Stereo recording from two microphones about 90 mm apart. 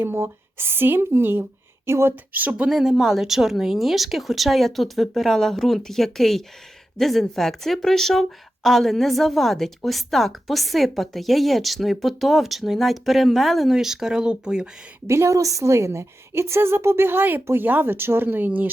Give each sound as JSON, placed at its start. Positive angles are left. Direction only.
{"t": 0.0, "sound": "a woman's voice", "side_deg": -25}
{"t": 2.6, "sound": "speech", "side_deg": -5}
{"t": 15.0, "sound": "a woman's voice", "side_deg": -30}